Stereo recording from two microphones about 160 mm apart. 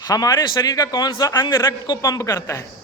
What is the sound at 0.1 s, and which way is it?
A man's voice, 25° left (ahead or behind).